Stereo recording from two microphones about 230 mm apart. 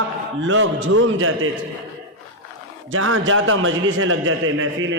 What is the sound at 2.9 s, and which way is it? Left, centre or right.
A man's voice, right.